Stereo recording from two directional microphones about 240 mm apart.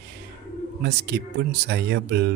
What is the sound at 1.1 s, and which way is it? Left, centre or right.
Speech, right.